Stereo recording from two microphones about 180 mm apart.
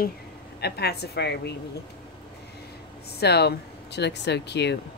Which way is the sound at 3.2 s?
65° left (ahead or behind).